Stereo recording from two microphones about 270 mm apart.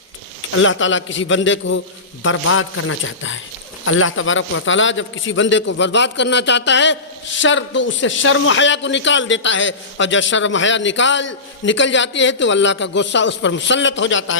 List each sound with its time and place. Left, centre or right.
0.5 s a man's voice: left